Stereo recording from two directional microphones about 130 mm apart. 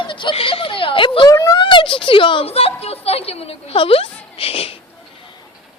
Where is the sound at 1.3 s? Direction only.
25° left (ahead or behind).